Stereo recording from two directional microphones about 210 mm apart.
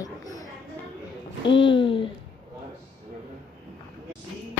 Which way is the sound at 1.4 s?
25° left (ahead or behind).